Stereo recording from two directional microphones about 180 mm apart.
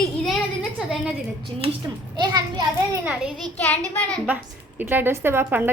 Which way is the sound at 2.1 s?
20° right (ahead or behind).